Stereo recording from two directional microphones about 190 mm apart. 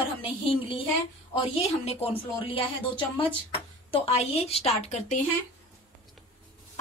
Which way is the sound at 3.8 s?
30° left (ahead or behind).